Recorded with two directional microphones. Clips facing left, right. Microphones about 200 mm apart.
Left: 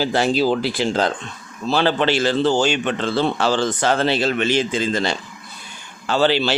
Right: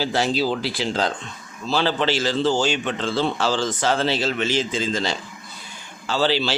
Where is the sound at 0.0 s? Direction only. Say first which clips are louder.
Left 4 dB; 50° left (ahead or behind).